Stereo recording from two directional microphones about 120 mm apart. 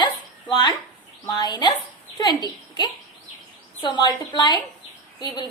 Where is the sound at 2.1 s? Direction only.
35° left (ahead or behind).